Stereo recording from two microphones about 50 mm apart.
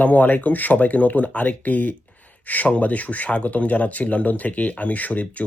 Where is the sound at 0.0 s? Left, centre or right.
Left.